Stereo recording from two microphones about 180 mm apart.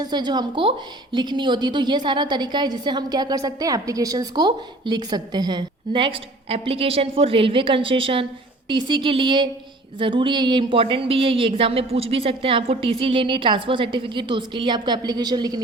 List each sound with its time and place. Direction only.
0.0 s a woman's voice: 25° right (ahead or behind)